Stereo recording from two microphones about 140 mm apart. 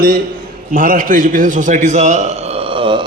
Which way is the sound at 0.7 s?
70° right (ahead or behind).